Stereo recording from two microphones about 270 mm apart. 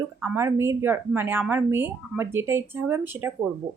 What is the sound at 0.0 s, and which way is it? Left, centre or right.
A woman's voice, centre.